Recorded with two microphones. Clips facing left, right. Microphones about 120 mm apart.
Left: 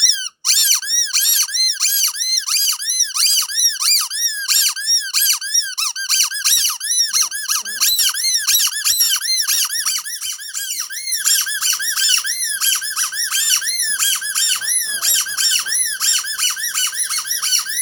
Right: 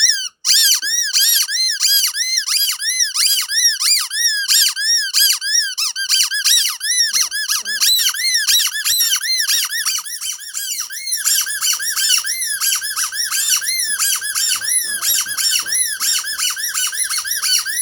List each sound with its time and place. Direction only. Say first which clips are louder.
0.0 s squeak: right 3 dB; 50° left (ahead or behind)
1.0 s a sound: right 3 dB; 45° left (ahead or behind)
7.9 s squeak: right 3 dB; 30° left (ahead or behind)
8.4 s squeak: right 4 dB; 45° left (ahead or behind)
8.6 s squeak: right 2 dB; 30° left (ahead or behind)
9.3 s squeak: right 3 dB; 40° left (ahead or behind)